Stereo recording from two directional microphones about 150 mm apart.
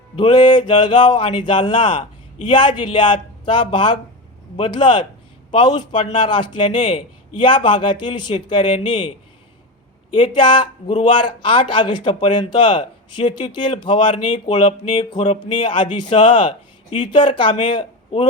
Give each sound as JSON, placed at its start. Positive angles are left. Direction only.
{"t": 0.2, "sound": "a man's voice", "side_deg": 30}